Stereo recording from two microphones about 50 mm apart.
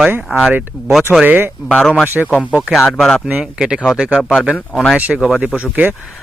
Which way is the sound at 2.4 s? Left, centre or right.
Right.